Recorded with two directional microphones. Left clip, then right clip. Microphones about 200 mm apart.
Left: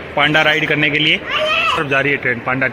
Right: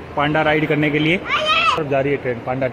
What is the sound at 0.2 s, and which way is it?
A man's voice, 10° left (ahead or behind).